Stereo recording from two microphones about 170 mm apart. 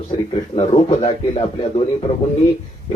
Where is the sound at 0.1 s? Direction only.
30° left (ahead or behind).